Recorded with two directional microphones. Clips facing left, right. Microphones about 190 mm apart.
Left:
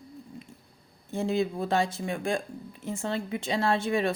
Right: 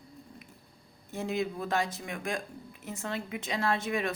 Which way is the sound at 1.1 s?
30° left (ahead or behind).